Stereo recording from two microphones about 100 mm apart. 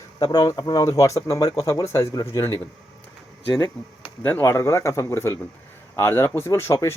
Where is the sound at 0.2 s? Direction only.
40° left (ahead or behind).